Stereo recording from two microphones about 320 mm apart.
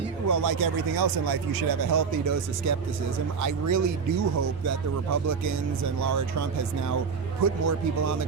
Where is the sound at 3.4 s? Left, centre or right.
Right.